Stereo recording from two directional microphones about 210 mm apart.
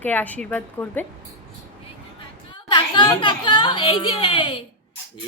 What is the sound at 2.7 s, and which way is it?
A woman's voice, 25° left (ahead or behind).